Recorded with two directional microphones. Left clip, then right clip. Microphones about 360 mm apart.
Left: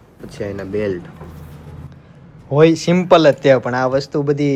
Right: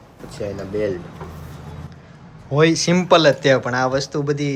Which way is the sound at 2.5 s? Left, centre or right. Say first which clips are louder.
Left 4 dB; centre.